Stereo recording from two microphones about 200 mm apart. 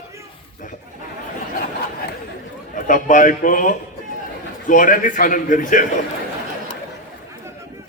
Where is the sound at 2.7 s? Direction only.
40° left (ahead or behind).